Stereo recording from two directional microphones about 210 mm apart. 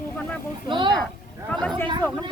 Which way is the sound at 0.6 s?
20° right (ahead or behind).